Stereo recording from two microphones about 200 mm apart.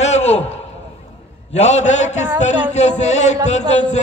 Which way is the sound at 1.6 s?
35° left (ahead or behind).